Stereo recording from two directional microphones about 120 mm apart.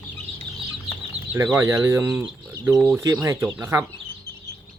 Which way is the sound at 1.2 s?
65° right (ahead or behind).